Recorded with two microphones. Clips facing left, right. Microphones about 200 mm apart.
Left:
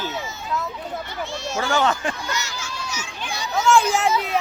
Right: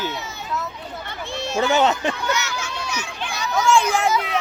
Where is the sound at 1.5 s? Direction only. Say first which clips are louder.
Right 3 dB; 20° right (ahead or behind).